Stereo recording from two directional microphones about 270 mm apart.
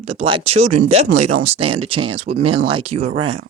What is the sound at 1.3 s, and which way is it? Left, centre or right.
Speech, right.